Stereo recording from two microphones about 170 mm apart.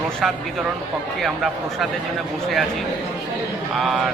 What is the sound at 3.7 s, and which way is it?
Speech, centre (ahead or behind).